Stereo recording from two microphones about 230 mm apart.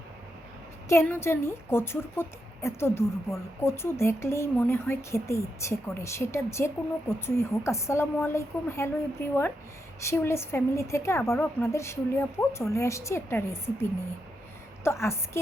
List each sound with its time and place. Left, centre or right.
0.9 s a woman's voice: centre
14.8 s a woman's voice: centre